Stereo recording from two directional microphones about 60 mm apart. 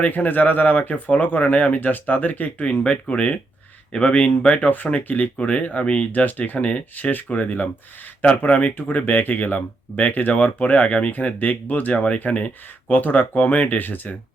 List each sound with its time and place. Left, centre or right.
0.0 s speech: left